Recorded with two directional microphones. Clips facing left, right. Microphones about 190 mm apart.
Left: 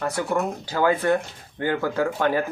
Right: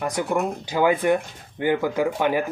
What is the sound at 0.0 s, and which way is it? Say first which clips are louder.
Speech: right 1 dB; 15° right (ahead or behind).